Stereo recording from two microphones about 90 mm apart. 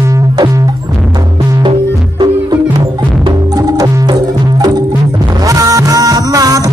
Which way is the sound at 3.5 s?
45° right (ahead or behind).